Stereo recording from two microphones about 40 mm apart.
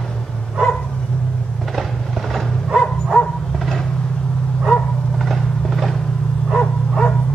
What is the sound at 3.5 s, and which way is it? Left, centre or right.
Vehicle, centre.